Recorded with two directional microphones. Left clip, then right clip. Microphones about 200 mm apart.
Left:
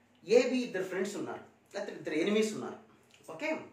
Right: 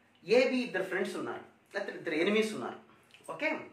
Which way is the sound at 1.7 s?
10° left (ahead or behind).